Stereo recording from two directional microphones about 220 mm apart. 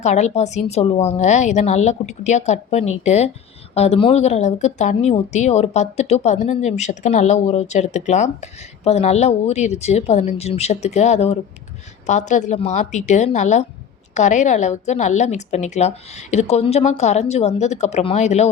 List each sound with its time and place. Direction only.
0.0 s a woman's voice: 30° left (ahead or behind)